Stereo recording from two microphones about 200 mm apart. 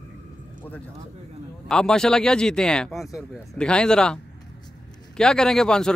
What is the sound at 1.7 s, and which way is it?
A man's voice, 5° left (ahead or behind).